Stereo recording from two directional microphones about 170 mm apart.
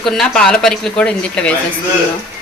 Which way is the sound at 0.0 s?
5° left (ahead or behind).